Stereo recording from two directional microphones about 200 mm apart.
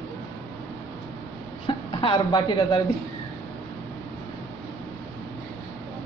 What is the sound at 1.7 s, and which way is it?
A woman's voice, 25° left (ahead or behind).